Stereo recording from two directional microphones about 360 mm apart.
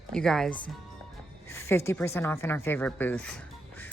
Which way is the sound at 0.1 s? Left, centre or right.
Centre.